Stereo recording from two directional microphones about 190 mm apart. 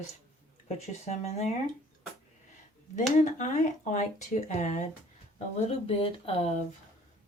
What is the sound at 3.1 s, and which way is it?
Speech, 40° left (ahead or behind).